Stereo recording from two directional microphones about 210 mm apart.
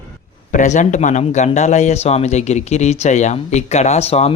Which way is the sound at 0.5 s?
35° left (ahead or behind).